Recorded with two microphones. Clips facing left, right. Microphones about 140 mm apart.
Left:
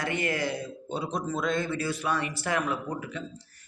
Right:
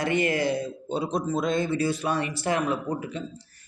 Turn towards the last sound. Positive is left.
turn(degrees=-25)  # may be behind; listen again after turning